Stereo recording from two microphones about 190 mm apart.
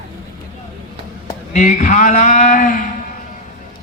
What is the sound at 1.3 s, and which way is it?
Speech, 40° left (ahead or behind).